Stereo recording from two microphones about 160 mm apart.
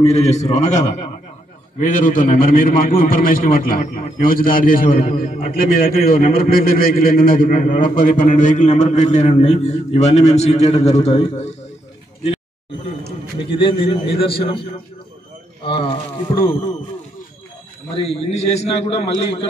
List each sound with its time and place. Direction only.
0.0 s a man's voice: 45° left (ahead or behind)
13.4 s a man's voice: 30° left (ahead or behind)
17.9 s a man's voice: 40° left (ahead or behind)